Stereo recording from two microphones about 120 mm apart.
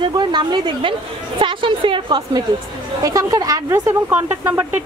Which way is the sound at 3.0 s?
30° right (ahead or behind).